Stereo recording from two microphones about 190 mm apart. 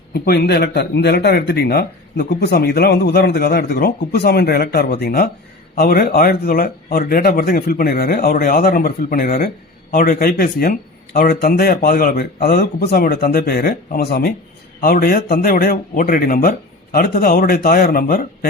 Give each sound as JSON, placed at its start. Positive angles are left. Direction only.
{"t": 0.1, "sound": "speech", "side_deg": 55}